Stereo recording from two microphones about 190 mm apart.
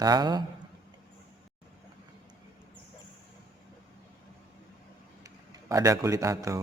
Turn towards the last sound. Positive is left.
turn(degrees=-15)  # may be behind; listen again after turning